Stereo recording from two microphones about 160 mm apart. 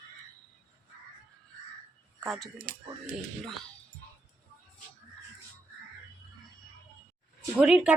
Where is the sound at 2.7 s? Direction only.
65° right (ahead or behind).